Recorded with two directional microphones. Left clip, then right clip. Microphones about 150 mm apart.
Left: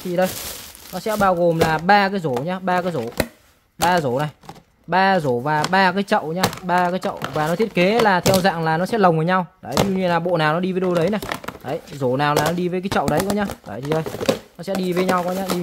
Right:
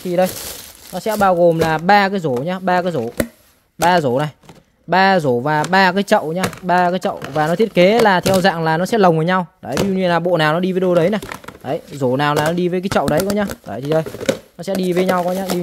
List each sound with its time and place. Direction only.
0.9 s speech: 40° right (ahead or behind)